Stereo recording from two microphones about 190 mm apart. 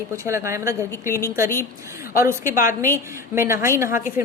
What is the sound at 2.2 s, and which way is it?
Speech, 15° right (ahead or behind).